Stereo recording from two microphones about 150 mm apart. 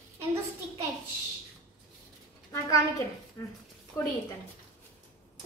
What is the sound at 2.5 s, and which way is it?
Speech, 20° left (ahead or behind).